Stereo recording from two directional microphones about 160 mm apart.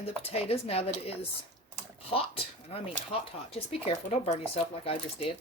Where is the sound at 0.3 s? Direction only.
40° left (ahead or behind).